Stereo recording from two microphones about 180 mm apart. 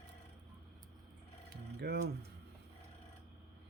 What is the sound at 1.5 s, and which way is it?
Mechanisms, 60° right (ahead or behind).